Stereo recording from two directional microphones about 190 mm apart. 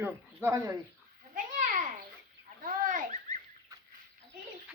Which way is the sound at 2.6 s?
45° right (ahead or behind).